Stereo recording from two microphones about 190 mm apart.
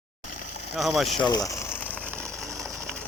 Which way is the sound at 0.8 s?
Centre (ahead or behind).